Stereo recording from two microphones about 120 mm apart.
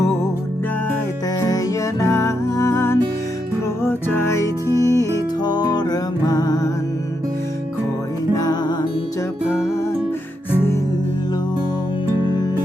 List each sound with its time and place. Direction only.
1.4 s music: 30° left (ahead or behind)
4.9 s music: 35° left (ahead or behind)
8.4 s music: 35° left (ahead or behind)
10.5 s music: 20° left (ahead or behind)